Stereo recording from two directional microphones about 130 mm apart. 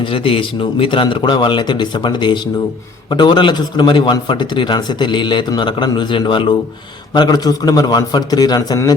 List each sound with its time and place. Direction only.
0.0 s a man's voice: 45° left (ahead or behind); by 8.9 s 30° left (ahead or behind)